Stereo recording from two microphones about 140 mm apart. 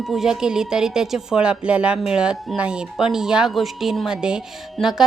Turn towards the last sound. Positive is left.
turn(degrees=-5)  # may be behind; listen again after turning